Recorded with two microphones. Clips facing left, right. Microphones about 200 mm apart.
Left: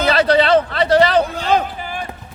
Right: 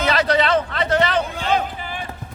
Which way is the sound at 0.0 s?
30° left (ahead or behind).